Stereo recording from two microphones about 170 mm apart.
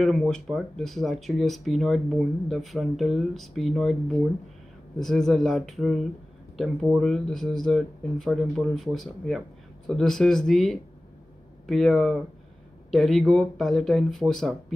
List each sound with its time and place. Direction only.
0.0 s speech: centre (ahead or behind)
4.9 s speech: centre (ahead or behind)